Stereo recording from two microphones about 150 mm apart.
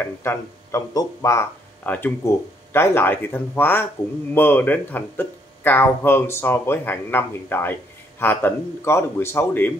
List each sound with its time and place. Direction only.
0.0 s speech: 15° left (ahead or behind)